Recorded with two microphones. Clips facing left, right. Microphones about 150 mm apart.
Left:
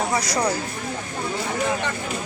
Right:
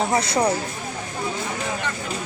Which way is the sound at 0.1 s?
25° right (ahead or behind).